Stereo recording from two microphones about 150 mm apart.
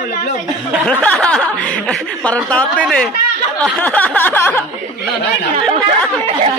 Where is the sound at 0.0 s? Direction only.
65° left (ahead or behind).